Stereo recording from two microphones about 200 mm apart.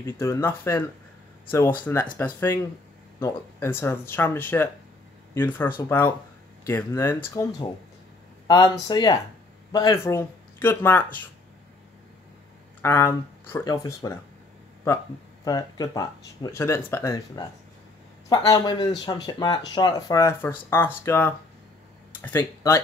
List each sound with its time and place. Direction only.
0.0 s speech: 15° left (ahead or behind)
12.8 s speech: 10° left (ahead or behind)
15.4 s speech: 20° left (ahead or behind)